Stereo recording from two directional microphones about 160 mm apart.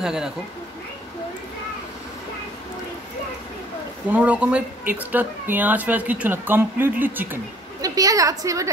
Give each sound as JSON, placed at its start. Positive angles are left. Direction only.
{"t": 0.0, "sound": "speech", "side_deg": -5}
{"t": 4.1, "sound": "speech", "side_deg": -10}
{"t": 7.8, "sound": "a woman's voice", "side_deg": -20}